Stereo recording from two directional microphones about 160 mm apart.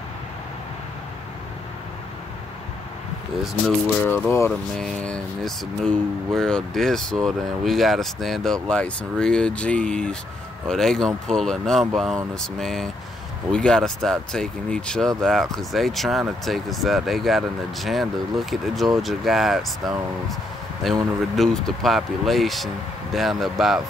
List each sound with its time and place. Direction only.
4.0 s speech: 15° left (ahead or behind)
4.5 s speech: 5° left (ahead or behind)